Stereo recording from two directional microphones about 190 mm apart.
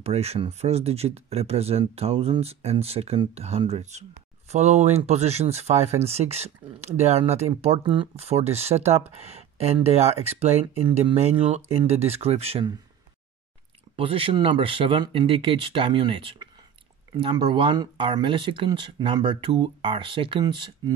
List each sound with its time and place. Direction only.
0.0 s speech: 35° right (ahead or behind)
13.9 s speech: 30° right (ahead or behind)